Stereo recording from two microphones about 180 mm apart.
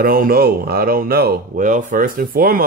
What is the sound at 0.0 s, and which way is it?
Speech, 50° right (ahead or behind).